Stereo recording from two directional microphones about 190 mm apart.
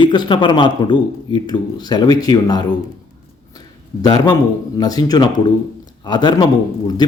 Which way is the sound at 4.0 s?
20° left (ahead or behind).